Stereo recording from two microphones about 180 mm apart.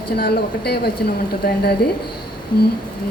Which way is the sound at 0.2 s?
60° left (ahead or behind).